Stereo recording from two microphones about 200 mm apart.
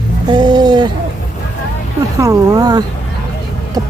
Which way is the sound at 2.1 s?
15° right (ahead or behind).